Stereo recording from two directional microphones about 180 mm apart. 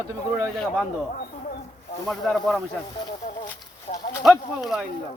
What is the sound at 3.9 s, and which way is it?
Speech, 40° left (ahead or behind).